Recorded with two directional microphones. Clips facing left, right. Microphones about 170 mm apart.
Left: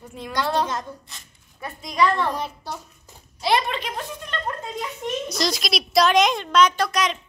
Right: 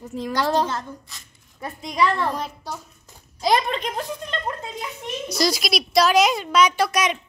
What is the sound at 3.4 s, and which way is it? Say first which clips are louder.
Speech: right 2 dB; 40° right (ahead or behind).